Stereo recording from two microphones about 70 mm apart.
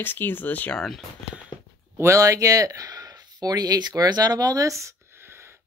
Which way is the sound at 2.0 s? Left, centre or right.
Right.